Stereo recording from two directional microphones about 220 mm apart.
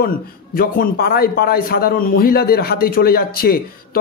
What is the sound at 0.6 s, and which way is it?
A man's voice, 45° left (ahead or behind).